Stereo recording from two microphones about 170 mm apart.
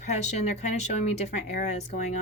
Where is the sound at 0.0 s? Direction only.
40° left (ahead or behind).